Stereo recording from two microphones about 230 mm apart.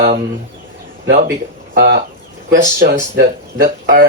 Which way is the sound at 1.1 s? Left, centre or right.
Right.